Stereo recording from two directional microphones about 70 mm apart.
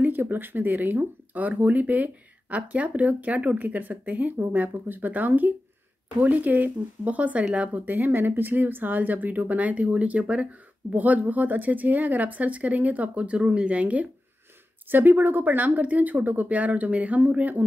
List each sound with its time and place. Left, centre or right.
0.0 s speech: right